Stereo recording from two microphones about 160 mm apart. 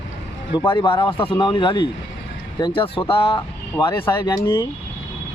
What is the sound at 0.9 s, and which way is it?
Speech, 30° left (ahead or behind).